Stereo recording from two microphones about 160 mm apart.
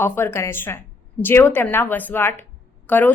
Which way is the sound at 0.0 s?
15° left (ahead or behind).